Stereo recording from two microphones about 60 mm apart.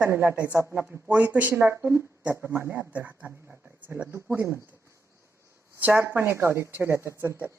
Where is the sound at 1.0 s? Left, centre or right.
Right.